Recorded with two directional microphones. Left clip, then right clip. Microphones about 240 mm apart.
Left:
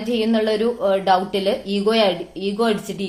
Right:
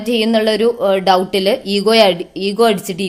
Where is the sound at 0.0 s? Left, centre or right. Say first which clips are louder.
Right 6 dB; right.